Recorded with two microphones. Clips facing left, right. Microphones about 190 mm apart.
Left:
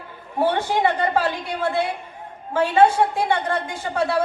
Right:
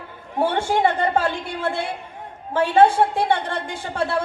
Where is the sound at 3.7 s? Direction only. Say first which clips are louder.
Left 2 dB; 55° right (ahead or behind).